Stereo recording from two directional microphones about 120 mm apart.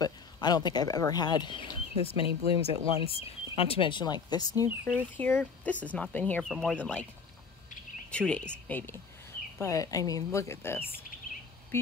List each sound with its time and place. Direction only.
0.0 s speech: 35° left (ahead or behind)
4.8 s speech: 15° left (ahead or behind)
8.1 s speech: 10° left (ahead or behind)
9.6 s a woman's voice: 30° left (ahead or behind)